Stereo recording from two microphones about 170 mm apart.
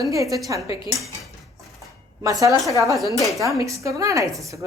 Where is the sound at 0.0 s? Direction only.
20° right (ahead or behind).